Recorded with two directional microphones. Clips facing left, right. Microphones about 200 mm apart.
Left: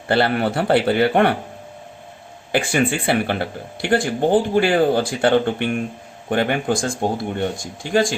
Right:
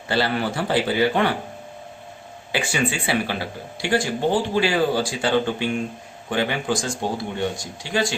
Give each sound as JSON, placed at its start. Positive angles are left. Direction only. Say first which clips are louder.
{"t": 0.1, "sound": "speech", "louder": "left 4 dB", "side_deg": 55}
{"t": 2.5, "sound": "speech", "louder": "left 5 dB", "side_deg": 50}